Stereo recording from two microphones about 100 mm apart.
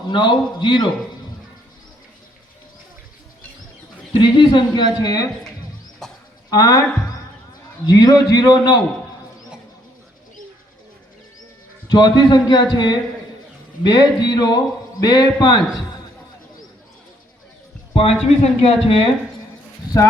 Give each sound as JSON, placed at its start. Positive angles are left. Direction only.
{"t": 0.1, "sound": "speech", "side_deg": 50}
{"t": 4.2, "sound": "speech", "side_deg": 50}
{"t": 6.0, "sound": "bird", "side_deg": 5}
{"t": 6.5, "sound": "a man's voice", "side_deg": 40}
{"t": 11.9, "sound": "speech", "side_deg": 50}
{"t": 18.3, "sound": "speech", "side_deg": 90}